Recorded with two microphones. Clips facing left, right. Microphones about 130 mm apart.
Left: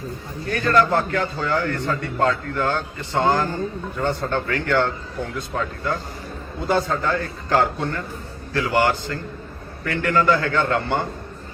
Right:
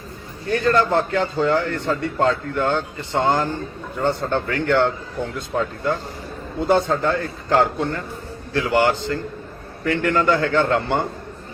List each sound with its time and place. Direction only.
0.4 s a man's voice: 25° right (ahead or behind)
6.6 s a man's voice: 25° right (ahead or behind)